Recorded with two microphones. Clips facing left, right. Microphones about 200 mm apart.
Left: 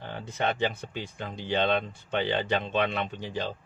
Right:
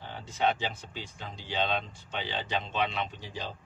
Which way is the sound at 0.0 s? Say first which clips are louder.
Right 1 dB; 55° left (ahead or behind).